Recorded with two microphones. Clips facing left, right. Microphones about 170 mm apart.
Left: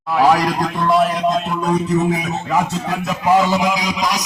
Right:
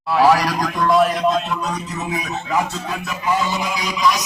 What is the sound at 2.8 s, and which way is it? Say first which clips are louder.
Music: left 5 dB; 75° left (ahead or behind).